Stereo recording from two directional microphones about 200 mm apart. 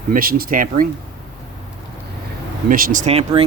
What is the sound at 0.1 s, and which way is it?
Speech, 45° right (ahead or behind).